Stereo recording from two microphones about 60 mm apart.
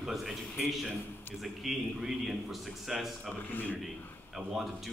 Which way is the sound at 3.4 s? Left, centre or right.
Left.